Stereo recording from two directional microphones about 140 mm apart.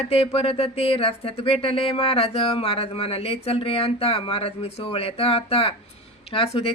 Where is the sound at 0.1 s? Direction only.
45° left (ahead or behind).